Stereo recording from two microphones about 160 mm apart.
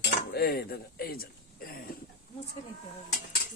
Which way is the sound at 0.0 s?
85° left.